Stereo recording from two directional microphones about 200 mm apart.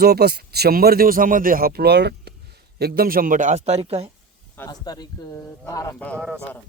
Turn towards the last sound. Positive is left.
turn(degrees=-5)  # may be behind; listen again after turning